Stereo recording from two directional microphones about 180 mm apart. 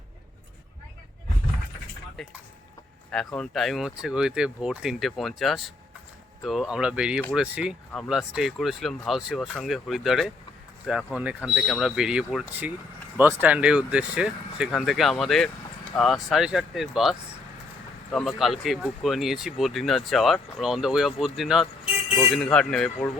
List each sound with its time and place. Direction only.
3.3 s speech: centre (ahead or behind)